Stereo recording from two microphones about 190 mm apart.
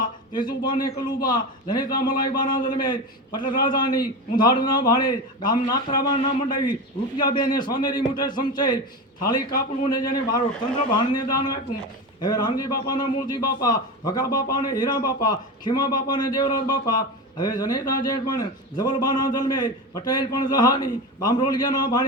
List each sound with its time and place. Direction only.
0.0 s a man's voice: 20° left (ahead or behind)
9.9 s a man's voice: 20° left (ahead or behind)